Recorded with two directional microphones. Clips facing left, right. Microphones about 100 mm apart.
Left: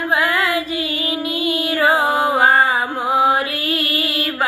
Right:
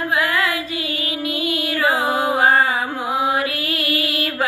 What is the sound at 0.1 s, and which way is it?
Music, 30° left (ahead or behind).